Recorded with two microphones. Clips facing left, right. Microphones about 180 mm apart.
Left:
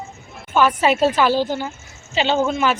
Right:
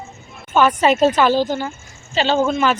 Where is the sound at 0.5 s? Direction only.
5° left (ahead or behind).